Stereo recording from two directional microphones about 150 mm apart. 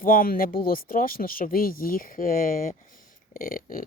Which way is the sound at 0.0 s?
70° left (ahead or behind).